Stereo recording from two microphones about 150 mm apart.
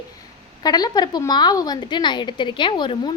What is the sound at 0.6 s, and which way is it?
A woman's voice, 25° left (ahead or behind).